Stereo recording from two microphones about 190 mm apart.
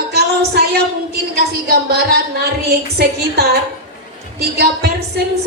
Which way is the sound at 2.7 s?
55° right (ahead or behind).